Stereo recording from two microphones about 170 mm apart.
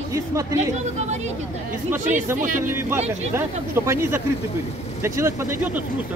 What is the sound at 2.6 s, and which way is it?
Speech, 15° right (ahead or behind).